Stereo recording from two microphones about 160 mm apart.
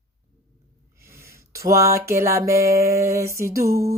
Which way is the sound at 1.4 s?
20° right (ahead or behind).